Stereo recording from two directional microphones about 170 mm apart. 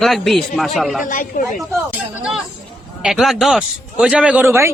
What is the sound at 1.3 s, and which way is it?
Speech, 50° left (ahead or behind).